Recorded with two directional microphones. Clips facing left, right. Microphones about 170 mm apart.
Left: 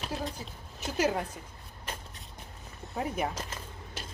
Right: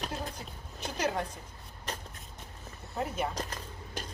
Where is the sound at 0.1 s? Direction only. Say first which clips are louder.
Left 3 dB; 5° left (ahead or behind).